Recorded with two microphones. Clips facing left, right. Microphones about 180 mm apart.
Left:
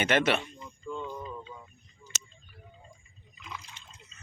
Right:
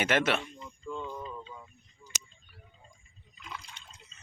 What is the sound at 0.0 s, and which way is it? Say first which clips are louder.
Speech: left 2 dB; 5° right (ahead or behind).